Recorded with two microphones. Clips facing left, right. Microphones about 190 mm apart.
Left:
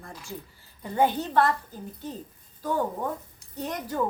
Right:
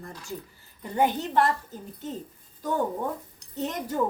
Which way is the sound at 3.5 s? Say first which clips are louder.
Right 2 dB; 20° right (ahead or behind).